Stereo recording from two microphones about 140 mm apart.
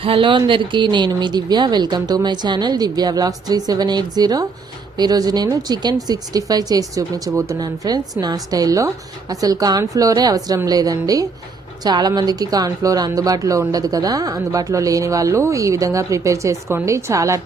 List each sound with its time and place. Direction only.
0.0 s a woman's voice: 40° right (ahead or behind); by 17.4 s 20° right (ahead or behind)